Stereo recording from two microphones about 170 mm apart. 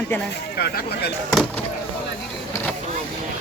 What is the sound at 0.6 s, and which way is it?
Speech, 70° left (ahead or behind).